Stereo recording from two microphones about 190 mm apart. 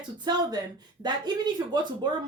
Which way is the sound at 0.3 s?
20° right (ahead or behind).